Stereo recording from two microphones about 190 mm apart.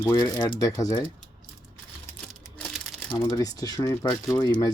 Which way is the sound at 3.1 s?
15° left (ahead or behind).